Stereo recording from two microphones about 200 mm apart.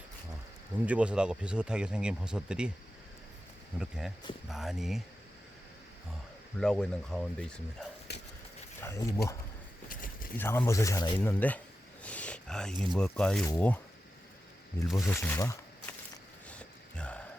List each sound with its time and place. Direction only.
0.9 s speech: 5° right (ahead or behind)
3.8 s speech: 5° right (ahead or behind)
6.6 s speech: 5° left (ahead or behind)
8.1 s a sound: 55° left (ahead or behind)
8.8 s speech: 15° left (ahead or behind)
9.9 s a sound: 45° left (ahead or behind)
10.3 s speech: 10° left (ahead or behind)
11.2 s speech: 10° left (ahead or behind)
14.9 s speech: 15° left (ahead or behind)
16.5 s a sound: 5° left (ahead or behind)